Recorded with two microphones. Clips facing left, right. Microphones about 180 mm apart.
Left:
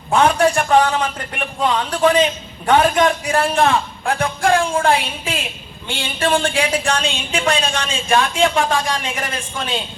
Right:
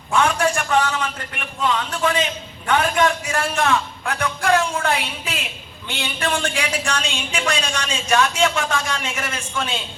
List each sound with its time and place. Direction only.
0.1 s a man's voice: 35° left (ahead or behind)